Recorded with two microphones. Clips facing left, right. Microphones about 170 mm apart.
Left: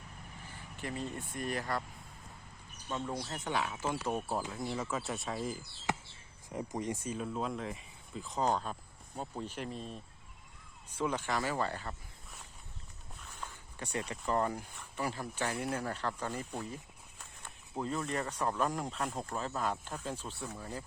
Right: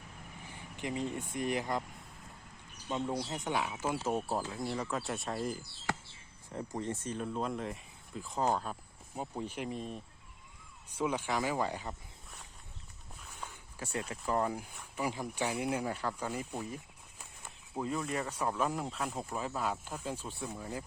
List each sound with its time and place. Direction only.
0.8 s speech: 15° right (ahead or behind)
2.9 s speech: 15° right (ahead or behind)
4.5 s speech: centre (ahead or behind)
5.9 s basketball bounce: 20° left (ahead or behind)
6.7 s speech: 15° left (ahead or behind); by 11.9 s 15° right (ahead or behind)
13.1 s speech: 5° right (ahead or behind)